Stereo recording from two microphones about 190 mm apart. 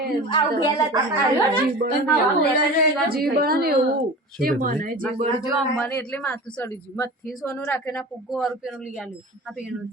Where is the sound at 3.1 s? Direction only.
50° right (ahead or behind).